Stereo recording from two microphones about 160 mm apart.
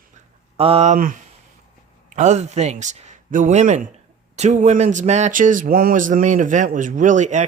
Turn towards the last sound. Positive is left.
turn(degrees=-50)  # may be behind; listen again after turning